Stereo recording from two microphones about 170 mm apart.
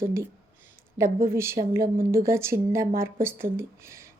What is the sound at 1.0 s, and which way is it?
A woman's voice, 15° right (ahead or behind).